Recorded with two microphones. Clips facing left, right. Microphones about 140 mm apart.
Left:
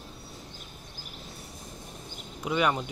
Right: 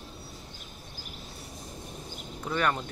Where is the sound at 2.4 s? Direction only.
10° left (ahead or behind).